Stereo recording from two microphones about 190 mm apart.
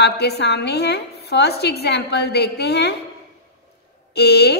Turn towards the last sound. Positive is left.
turn(degrees=60)  # may be behind; listen again after turning